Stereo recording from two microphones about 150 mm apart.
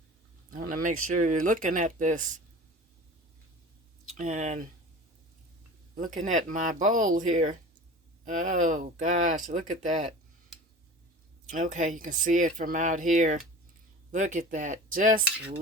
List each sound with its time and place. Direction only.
0.5 s speech: 65° right (ahead or behind)
4.2 s speech: 55° right (ahead or behind)
6.0 s speech: 60° right (ahead or behind)
11.5 s speech: 60° right (ahead or behind)